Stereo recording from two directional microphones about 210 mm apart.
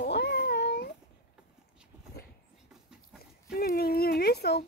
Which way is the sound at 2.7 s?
Centre (ahead or behind).